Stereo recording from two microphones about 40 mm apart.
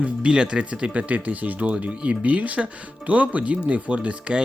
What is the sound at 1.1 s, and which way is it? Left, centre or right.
Speech, right.